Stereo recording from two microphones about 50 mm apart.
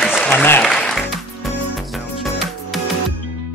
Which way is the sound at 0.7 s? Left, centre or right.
Centre.